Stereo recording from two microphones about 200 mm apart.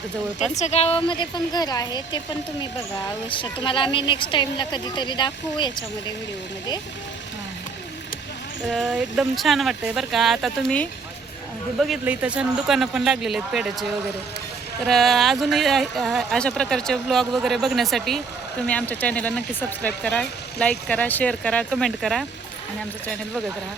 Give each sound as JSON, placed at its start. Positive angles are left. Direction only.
{"t": 0.6, "sound": "speech", "side_deg": 30}
{"t": 8.6, "sound": "speech", "side_deg": 0}
{"t": 14.8, "sound": "speech", "side_deg": 0}